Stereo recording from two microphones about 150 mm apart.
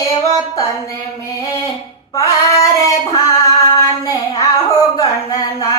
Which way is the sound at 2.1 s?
25° left (ahead or behind).